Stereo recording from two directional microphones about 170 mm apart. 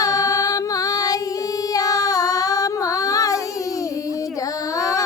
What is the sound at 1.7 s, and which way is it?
Child singing, 20° left (ahead or behind).